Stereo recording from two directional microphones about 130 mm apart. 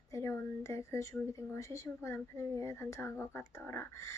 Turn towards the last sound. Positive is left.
turn(degrees=20)  # may be behind; listen again after turning